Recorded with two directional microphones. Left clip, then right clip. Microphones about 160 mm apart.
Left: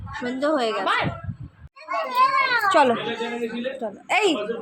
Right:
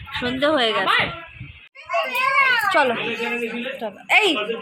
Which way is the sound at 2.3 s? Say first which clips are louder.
Right 1 dB; 45° left (ahead or behind).